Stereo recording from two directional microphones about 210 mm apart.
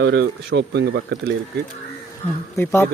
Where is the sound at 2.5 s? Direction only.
10° left (ahead or behind).